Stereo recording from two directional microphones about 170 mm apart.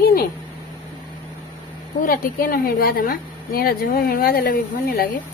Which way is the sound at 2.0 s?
55° left (ahead or behind).